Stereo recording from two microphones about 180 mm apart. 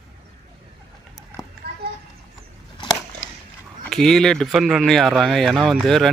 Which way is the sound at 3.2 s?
90° left.